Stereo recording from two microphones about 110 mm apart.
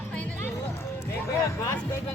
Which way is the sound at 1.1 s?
30° left (ahead or behind).